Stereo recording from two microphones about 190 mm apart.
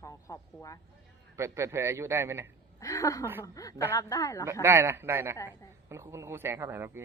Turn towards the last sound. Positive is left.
turn(degrees=-15)  # may be behind; listen again after turning